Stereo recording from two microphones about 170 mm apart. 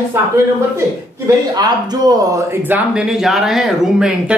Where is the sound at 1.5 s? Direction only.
25° right (ahead or behind).